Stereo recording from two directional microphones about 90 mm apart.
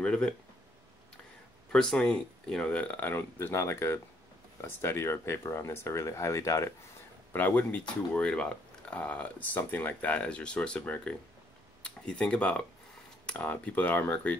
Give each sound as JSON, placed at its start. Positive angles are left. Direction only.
{"t": 0.0, "sound": "speech", "side_deg": 10}
{"t": 1.7, "sound": "speech", "side_deg": 5}
{"t": 7.3, "sound": "speech", "side_deg": 20}